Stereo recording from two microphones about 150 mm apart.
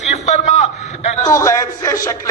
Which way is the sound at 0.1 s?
50° left (ahead or behind).